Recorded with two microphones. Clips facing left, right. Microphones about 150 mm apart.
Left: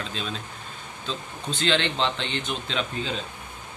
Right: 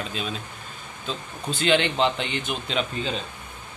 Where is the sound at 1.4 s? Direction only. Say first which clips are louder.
Right 3 dB; 10° right (ahead or behind).